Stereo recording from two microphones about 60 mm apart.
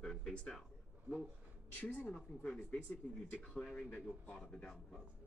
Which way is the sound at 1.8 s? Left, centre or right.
Left.